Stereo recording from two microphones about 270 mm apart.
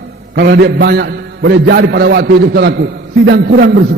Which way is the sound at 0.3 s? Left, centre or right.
Right.